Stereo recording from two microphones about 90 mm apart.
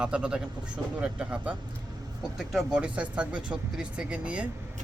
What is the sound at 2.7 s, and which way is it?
Speech, 10° right (ahead or behind).